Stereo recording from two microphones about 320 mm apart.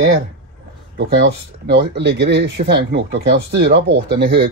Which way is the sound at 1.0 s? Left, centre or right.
Right.